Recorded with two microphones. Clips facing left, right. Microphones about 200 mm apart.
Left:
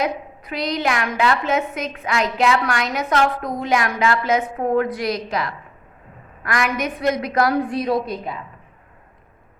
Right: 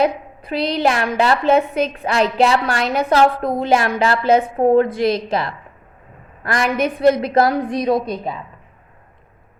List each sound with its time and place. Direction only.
0.0 s a woman's voice: 30° right (ahead or behind)
7.5 s a woman's voice: 15° right (ahead or behind)